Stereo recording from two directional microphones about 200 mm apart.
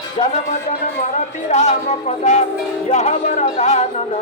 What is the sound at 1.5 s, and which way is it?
A man's voice, 35° left (ahead or behind).